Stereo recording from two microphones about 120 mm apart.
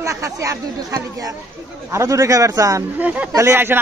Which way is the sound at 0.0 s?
25° right (ahead or behind).